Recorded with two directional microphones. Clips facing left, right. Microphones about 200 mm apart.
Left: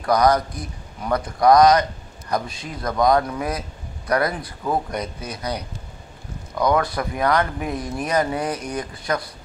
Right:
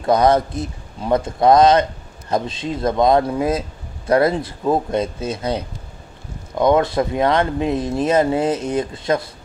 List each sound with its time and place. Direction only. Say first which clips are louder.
0.0 s a man's voice: right 3 dB; 25° right (ahead or behind)